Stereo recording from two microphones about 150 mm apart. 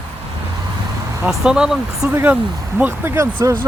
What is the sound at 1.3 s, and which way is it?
Speech, 5° right (ahead or behind).